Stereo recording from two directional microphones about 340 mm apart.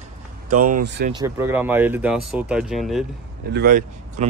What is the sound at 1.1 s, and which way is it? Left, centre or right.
Speech, centre.